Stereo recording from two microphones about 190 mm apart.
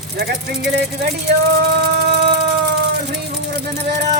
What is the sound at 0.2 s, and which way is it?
Speech, 60° right (ahead or behind).